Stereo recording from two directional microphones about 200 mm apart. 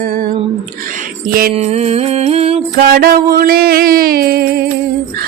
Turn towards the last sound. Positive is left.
turn(degrees=-50)  # may be behind; listen again after turning